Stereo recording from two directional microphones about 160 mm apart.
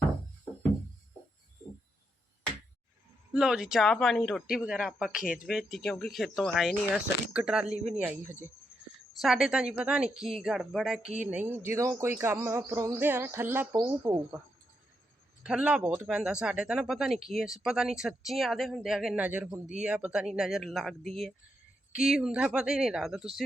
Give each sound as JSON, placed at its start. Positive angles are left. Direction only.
{"t": 3.3, "sound": "speech", "side_deg": -5}
{"t": 5.2, "sound": "speech", "side_deg": 60}
{"t": 5.5, "sound": "speech", "side_deg": 0}
{"t": 8.9, "sound": "a sound", "side_deg": -5}
{"t": 9.2, "sound": "speech", "side_deg": 0}
{"t": 15.4, "sound": "speech", "side_deg": -5}